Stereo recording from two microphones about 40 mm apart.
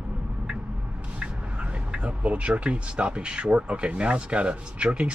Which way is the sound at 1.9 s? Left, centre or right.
Right.